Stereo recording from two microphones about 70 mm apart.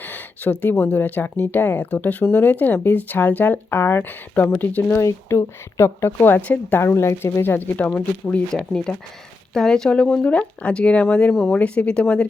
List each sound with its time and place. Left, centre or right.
0.0 s a sound: left
0.6 s speech: left
6.2 s speech: left
6.8 s speech: left
7.4 s speech: left
8.5 s speech: centre